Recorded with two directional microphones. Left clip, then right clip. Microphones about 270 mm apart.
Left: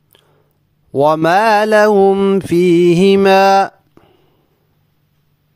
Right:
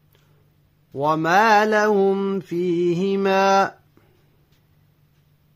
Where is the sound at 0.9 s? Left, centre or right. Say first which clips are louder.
Left 8 dB; left.